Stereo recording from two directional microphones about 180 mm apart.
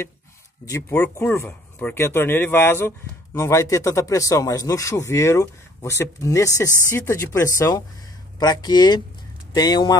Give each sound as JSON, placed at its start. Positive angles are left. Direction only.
{"t": 0.7, "sound": "speech", "side_deg": 15}